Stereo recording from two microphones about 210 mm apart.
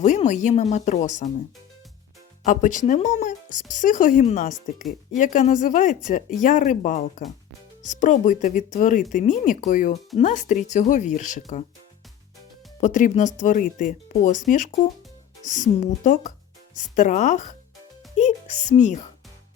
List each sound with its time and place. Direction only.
0.0 s speech: 35° left (ahead or behind)
2.4 s speech: 35° left (ahead or behind)
12.8 s speech: 35° left (ahead or behind)